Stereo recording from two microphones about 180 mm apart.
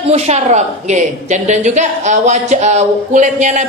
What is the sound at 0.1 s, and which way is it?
A woman's voice, 40° right (ahead or behind).